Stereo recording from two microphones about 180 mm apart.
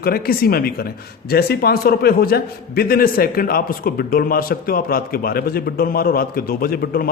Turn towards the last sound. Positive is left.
turn(degrees=55)  # may be behind; listen again after turning